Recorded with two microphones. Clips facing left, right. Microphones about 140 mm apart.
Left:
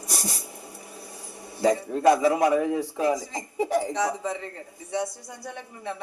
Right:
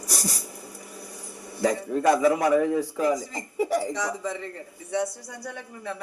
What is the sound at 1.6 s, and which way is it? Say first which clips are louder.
A woman's voice: left 2 dB; 20° left (ahead or behind).